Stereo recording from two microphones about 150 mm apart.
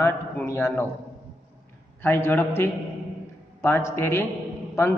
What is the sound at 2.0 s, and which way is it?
A man's voice, 15° left (ahead or behind).